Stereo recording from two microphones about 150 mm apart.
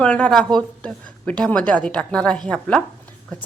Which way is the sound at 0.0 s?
5° left (ahead or behind).